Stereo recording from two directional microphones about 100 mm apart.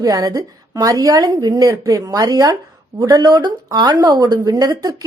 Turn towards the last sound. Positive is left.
turn(degrees=-40)  # may be behind; listen again after turning